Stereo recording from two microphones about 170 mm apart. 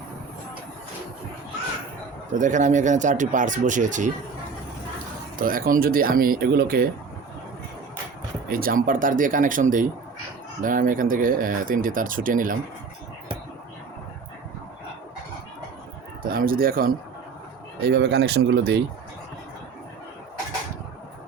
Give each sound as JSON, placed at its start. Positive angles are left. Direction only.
{"t": 2.3, "sound": "speech", "side_deg": -45}
{"t": 5.4, "sound": "speech", "side_deg": -55}
{"t": 8.4, "sound": "speech", "side_deg": -55}
{"t": 16.2, "sound": "speech", "side_deg": -60}
{"t": 17.8, "sound": "speech", "side_deg": -75}